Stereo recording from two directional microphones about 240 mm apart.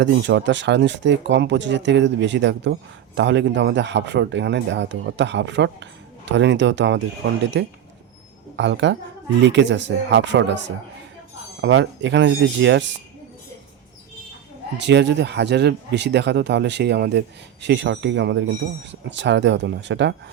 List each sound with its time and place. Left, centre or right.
0.0 s speech: right
11.6 s speech: right
14.8 s speech: right